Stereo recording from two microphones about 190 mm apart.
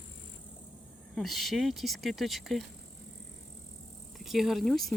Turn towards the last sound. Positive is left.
turn(degrees=0)  # may be behind; listen again after turning